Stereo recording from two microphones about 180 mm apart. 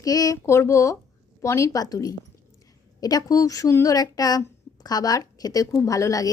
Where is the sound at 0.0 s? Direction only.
20° left (ahead or behind).